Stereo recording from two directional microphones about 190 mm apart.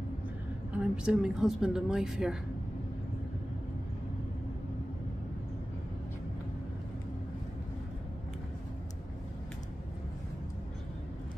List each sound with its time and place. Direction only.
0.7 s speech: 5° right (ahead or behind)